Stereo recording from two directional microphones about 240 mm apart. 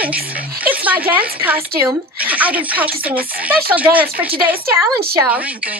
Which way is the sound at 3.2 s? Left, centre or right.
Right.